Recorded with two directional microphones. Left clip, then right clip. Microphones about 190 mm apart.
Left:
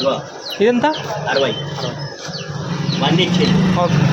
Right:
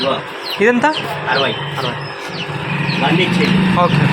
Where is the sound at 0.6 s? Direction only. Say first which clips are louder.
Right 2 dB; 10° left (ahead or behind).